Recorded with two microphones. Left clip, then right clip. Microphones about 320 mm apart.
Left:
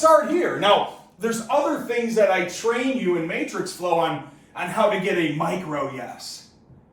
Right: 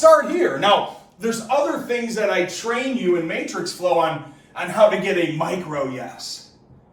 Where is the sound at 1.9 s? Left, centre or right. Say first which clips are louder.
Left 2 dB; centre.